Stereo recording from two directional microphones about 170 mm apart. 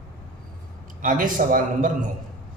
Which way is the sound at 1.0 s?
50° right (ahead or behind).